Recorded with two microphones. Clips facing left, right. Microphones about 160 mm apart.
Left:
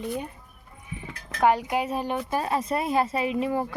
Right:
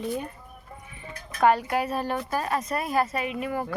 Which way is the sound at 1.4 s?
15° left (ahead or behind).